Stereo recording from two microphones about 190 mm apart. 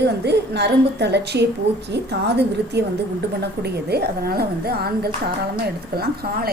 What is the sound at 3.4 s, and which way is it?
A woman's voice, 60° right (ahead or behind).